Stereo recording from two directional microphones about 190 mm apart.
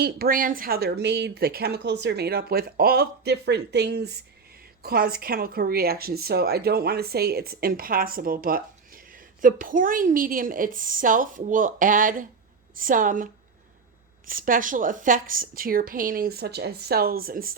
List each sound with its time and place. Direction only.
0.0 s speech: 50° right (ahead or behind)
14.3 s speech: 45° right (ahead or behind)